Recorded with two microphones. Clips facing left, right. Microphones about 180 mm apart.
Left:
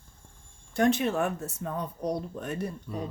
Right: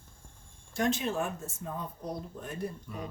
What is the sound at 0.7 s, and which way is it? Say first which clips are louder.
Speech: left 5 dB; 60° left (ahead or behind).